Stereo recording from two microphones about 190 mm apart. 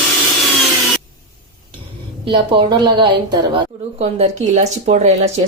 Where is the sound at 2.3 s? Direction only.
25° right (ahead or behind).